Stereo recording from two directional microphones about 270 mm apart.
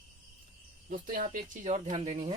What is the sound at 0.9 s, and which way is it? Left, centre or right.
Speech, right.